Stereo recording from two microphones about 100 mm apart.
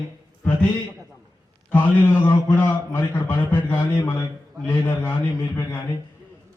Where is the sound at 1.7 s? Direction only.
20° left (ahead or behind).